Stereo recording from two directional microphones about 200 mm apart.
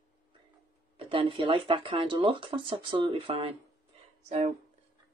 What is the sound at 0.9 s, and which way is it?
Speech, 25° right (ahead or behind).